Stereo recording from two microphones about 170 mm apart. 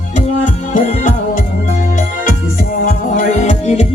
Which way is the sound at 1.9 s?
50° left (ahead or behind).